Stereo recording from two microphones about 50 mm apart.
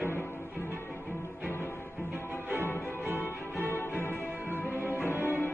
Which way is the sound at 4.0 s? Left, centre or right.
Left.